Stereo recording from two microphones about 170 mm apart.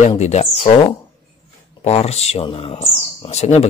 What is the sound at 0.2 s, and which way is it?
Speech, 40° left (ahead or behind).